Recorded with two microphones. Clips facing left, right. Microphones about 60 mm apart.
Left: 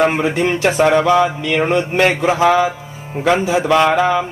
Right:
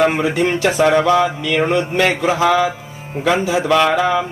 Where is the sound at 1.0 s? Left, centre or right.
Left.